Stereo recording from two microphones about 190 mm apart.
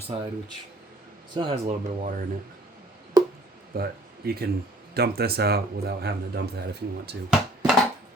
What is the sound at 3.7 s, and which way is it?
Speech, 55° right (ahead or behind).